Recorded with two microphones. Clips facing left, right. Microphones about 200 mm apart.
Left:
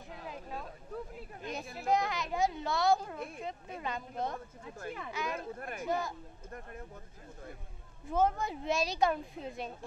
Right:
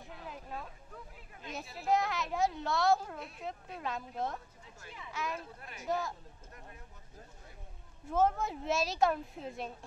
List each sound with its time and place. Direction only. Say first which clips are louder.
0.3 s a sound: left 1 dB; centre (ahead or behind)
1.9 s a woman's voice: even; centre (ahead or behind)
4.6 s speech: left 9 dB; 55° left (ahead or behind)
5.9 s a woman's voice: even; centre (ahead or behind)
8.1 s a woman's voice: even; centre (ahead or behind)